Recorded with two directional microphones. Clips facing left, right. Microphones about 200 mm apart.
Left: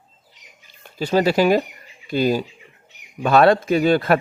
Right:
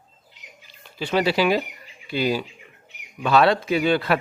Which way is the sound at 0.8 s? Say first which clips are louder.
Left 4 dB; 40° left (ahead or behind).